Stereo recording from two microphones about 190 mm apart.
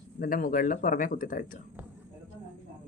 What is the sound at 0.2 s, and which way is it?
A man's voice, 50° left (ahead or behind).